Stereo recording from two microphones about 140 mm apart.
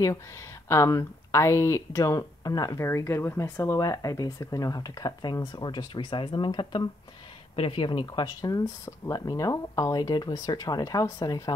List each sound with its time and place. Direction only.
0.0 s speech: 20° left (ahead or behind)